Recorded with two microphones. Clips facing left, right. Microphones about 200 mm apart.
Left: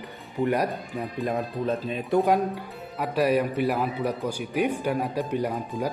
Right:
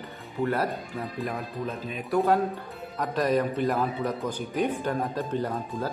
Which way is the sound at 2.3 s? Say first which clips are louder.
Left 1 dB; 10° left (ahead or behind).